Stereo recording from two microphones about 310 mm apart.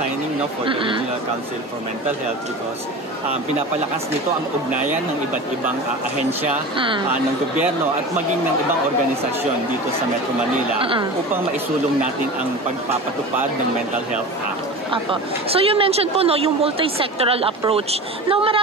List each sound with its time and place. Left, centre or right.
0.7 s speech: centre
6.8 s speech: centre
10.8 s speech: centre
14.9 s speech: centre